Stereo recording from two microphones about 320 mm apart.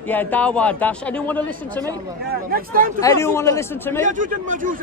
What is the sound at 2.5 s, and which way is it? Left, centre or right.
Speech, right.